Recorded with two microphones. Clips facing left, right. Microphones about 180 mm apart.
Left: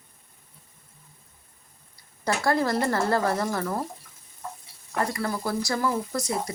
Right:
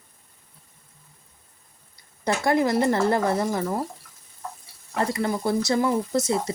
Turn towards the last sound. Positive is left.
turn(degrees=-25)  # may be behind; listen again after turning